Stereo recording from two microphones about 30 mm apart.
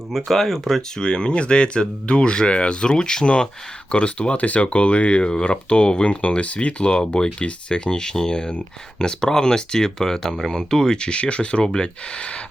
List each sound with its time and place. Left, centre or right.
0.3 s speech: centre
0.8 s speech: left
4.4 s speech: left
6.1 s speech: left